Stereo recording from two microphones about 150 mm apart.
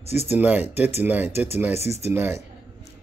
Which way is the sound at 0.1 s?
45° left (ahead or behind).